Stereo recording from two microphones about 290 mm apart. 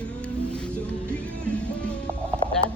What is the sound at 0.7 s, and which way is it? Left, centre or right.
Music, centre.